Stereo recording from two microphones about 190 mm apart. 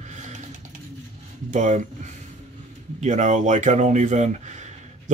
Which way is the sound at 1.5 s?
40° right (ahead or behind).